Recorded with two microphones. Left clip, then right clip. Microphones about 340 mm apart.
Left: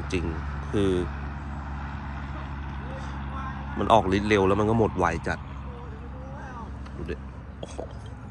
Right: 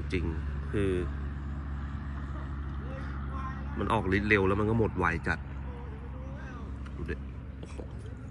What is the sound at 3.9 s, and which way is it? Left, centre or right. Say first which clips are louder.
Speech: left 7 dB; centre.